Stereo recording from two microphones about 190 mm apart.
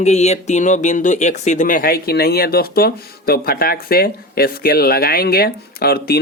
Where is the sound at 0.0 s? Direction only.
35° left (ahead or behind).